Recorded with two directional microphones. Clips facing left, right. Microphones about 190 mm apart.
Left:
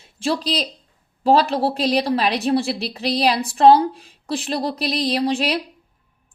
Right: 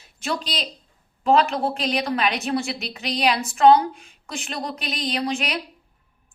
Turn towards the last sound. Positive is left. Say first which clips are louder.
# left 5 dB
turn(degrees=30)  # may be behind; listen again after turning